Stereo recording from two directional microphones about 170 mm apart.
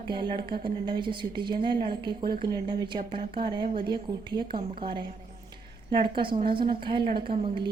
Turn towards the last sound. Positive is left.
turn(degrees=-30)  # may be behind; listen again after turning